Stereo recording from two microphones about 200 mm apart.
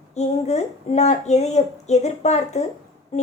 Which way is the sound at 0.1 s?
35° left (ahead or behind).